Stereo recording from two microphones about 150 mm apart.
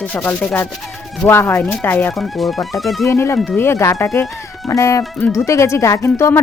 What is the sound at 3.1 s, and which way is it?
Speech, 15° left (ahead or behind).